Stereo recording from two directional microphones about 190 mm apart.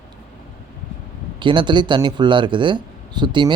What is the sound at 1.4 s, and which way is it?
Speech, 25° right (ahead or behind).